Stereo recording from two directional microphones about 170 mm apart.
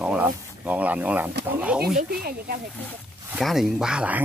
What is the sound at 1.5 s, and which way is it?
Speech, 10° right (ahead or behind).